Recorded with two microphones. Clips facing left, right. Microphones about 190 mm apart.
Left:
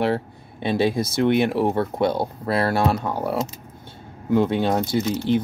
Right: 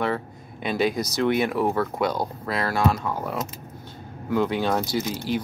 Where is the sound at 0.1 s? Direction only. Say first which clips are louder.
Left 4 dB; 30° left (ahead or behind).